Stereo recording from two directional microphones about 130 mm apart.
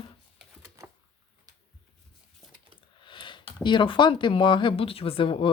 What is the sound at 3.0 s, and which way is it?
Speech, 40° left (ahead or behind).